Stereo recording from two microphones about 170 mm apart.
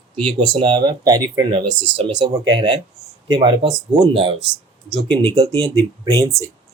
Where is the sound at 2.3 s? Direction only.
25° right (ahead or behind).